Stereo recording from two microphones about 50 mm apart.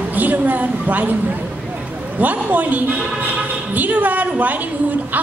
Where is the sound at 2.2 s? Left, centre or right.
Right.